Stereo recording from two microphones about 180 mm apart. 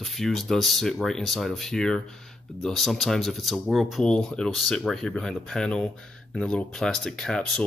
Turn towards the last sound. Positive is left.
turn(degrees=5)  # may be behind; listen again after turning